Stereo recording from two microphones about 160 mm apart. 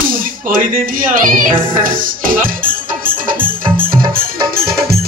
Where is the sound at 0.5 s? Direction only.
60° right (ahead or behind).